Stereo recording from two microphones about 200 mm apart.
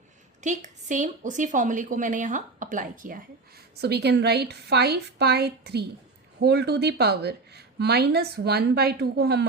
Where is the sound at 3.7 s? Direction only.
55° right (ahead or behind).